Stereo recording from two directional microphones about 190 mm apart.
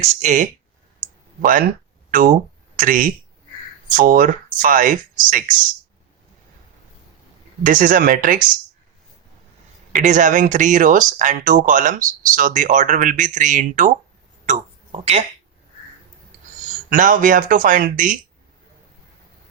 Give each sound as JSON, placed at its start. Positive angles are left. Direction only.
{"t": 0.0, "sound": "speech", "side_deg": -40}
{"t": 7.6, "sound": "speech", "side_deg": -45}
{"t": 9.9, "sound": "speech", "side_deg": -40}
{"t": 14.4, "sound": "a sound", "side_deg": -35}
{"t": 16.9, "sound": "speech", "side_deg": -45}